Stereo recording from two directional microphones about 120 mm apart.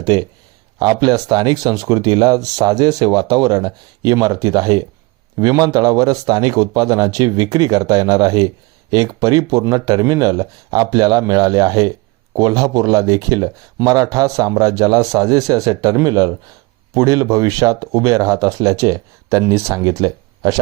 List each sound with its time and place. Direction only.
0.0 s a man's voice: 35° right (ahead or behind)